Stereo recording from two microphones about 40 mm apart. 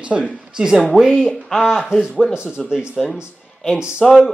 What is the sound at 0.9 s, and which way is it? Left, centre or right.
Speech, centre.